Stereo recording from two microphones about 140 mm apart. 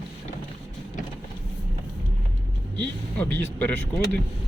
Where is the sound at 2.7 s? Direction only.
10° left (ahead or behind).